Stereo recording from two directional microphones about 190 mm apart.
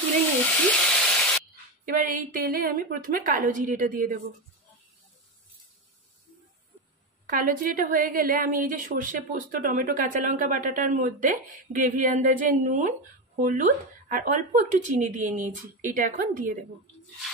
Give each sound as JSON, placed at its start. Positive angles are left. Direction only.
{"t": 0.7, "sound": "frying", "side_deg": 5}
{"t": 2.0, "sound": "a woman's voice", "side_deg": -45}
{"t": 7.2, "sound": "a woman's voice", "side_deg": -45}